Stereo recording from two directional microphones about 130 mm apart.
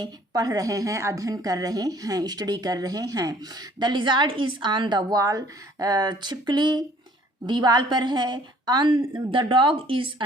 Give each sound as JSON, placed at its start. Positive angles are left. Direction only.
{"t": 0.0, "sound": "a woman's voice", "side_deg": -30}